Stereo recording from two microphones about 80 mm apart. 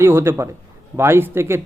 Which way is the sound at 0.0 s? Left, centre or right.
Right.